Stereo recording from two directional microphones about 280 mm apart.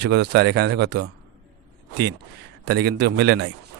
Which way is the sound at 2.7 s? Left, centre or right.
Right.